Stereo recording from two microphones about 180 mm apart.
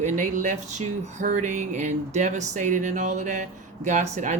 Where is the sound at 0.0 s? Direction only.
40° right (ahead or behind).